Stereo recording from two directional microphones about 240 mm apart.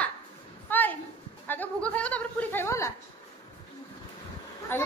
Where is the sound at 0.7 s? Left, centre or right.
Centre.